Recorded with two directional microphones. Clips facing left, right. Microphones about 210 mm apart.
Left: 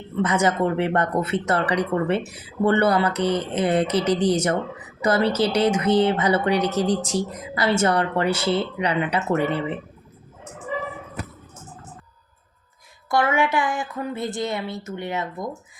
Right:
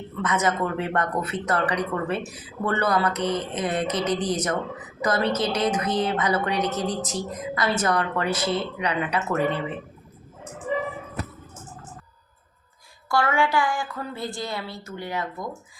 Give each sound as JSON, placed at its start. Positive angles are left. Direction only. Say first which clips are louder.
{"t": 0.2, "sound": "speech", "louder": "left 4 dB", "side_deg": 30}
{"t": 13.1, "sound": "speech", "louder": "left 2 dB", "side_deg": 20}